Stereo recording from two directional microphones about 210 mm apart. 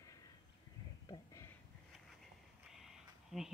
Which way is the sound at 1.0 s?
15° left (ahead or behind).